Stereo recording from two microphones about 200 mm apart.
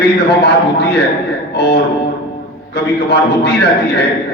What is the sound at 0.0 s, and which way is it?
A man's voice, 55° left (ahead or behind).